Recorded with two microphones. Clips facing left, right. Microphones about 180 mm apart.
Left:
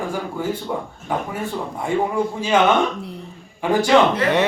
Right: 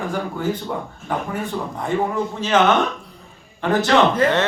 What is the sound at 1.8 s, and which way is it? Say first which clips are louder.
Speech: left 1 dB; 10° left (ahead or behind).